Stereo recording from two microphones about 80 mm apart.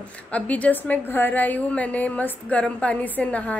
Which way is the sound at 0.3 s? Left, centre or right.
Centre.